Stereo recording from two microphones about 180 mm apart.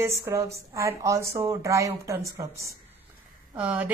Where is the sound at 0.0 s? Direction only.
15° right (ahead or behind).